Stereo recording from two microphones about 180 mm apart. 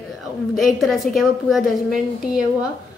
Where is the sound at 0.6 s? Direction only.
Centre (ahead or behind).